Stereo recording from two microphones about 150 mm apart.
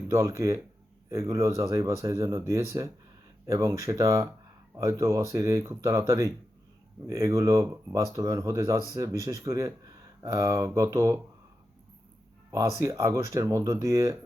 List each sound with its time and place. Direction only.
0.1 s speech: 20° right (ahead or behind)
12.5 s speech: 20° right (ahead or behind)